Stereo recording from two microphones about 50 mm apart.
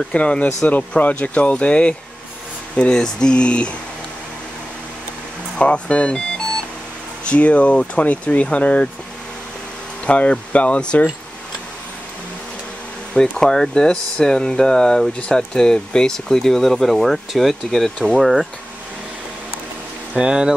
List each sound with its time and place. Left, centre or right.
0.1 s speech: left
5.6 s speech: left
10.0 s speech: left
13.1 s speech: centre
20.2 s speech: centre